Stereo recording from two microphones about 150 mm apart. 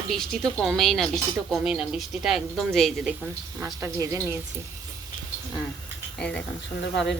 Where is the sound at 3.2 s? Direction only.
20° right (ahead or behind).